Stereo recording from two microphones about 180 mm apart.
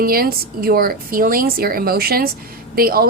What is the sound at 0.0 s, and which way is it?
A woman's voice, 55° right (ahead or behind).